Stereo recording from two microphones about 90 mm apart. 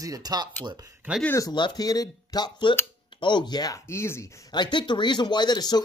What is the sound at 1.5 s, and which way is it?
A man's voice, 50° left (ahead or behind).